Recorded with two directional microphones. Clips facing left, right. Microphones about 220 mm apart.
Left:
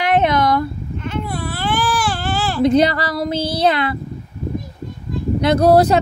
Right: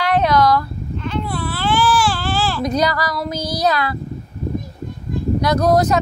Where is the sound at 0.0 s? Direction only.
20° left (ahead or behind).